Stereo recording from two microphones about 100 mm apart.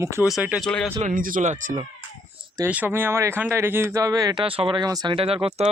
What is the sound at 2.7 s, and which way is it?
Speech, 20° right (ahead or behind).